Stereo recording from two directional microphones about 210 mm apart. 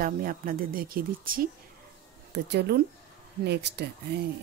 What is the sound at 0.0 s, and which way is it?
Speech, 45° right (ahead or behind).